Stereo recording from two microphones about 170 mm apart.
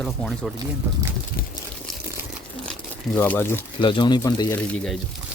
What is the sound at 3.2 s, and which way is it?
Speech, 10° left (ahead or behind).